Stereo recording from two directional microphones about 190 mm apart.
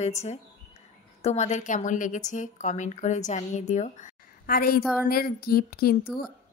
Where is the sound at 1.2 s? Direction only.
35° left (ahead or behind).